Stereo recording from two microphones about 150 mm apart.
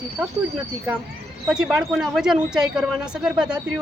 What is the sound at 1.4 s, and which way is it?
Speech, 5° right (ahead or behind).